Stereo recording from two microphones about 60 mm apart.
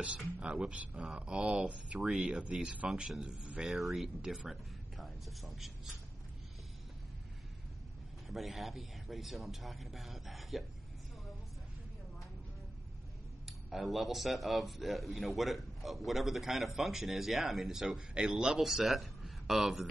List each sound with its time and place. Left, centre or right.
0.4 s a man's voice: centre
8.3 s a man's voice: centre
13.5 s a man's voice: centre